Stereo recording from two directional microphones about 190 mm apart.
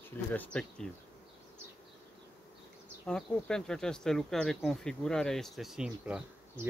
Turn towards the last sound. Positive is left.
turn(degrees=-5)  # may be behind; listen again after turning